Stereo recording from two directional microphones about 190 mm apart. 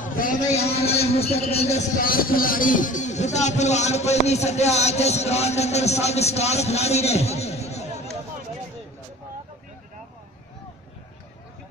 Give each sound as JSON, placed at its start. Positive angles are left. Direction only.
{"t": 0.0, "sound": "a man's voice", "side_deg": 45}
{"t": 0.6, "sound": "a man's voice", "side_deg": 30}
{"t": 2.0, "sound": "a man's voice", "side_deg": 50}